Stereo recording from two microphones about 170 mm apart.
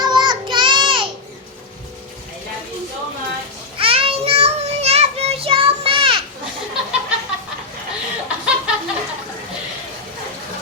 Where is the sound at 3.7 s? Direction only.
35° right (ahead or behind).